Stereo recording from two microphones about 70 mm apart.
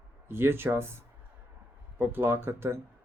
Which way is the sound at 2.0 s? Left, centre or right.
Right.